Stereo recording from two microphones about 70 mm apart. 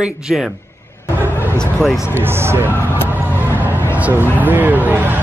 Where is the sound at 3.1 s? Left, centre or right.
Right.